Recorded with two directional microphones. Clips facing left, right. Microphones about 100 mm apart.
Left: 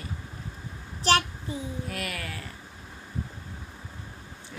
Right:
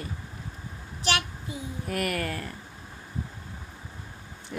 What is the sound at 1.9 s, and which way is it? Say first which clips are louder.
Speech: right 6 dB; 50° right (ahead or behind).